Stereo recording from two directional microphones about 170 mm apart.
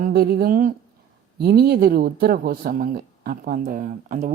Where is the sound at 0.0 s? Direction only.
60° right (ahead or behind).